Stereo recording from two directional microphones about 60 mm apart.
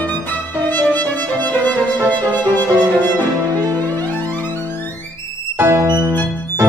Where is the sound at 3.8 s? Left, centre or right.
Left.